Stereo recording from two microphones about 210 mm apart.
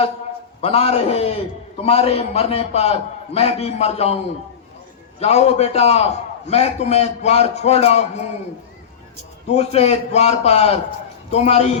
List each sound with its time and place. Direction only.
0.6 s a man's voice: 30° left (ahead or behind)
5.2 s a man's voice: 30° left (ahead or behind)
9.5 s a man's voice: 30° left (ahead or behind)